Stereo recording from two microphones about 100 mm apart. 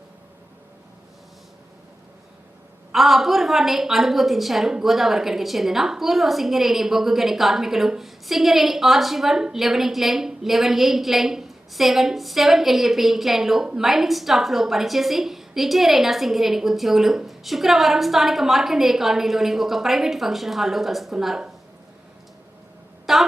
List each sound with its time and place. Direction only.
2.9 s a woman's voice: centre (ahead or behind)
23.1 s a woman's voice: centre (ahead or behind)